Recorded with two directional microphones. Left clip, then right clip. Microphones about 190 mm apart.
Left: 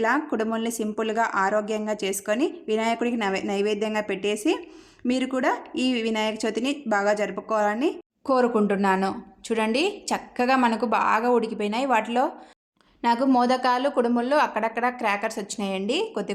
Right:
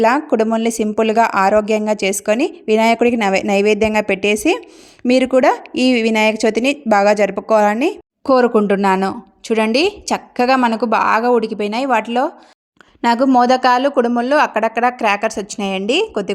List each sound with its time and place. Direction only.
0.0 s speech: 40° right (ahead or behind)